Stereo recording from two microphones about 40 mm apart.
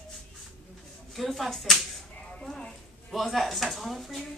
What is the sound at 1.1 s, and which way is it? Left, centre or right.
Speech, centre.